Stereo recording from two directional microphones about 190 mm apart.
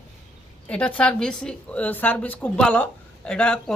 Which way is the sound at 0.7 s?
5° left (ahead or behind).